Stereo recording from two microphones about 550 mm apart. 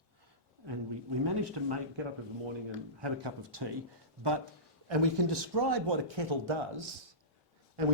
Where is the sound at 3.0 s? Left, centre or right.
Right.